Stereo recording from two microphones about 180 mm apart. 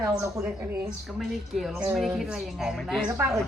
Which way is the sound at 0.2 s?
10° right (ahead or behind).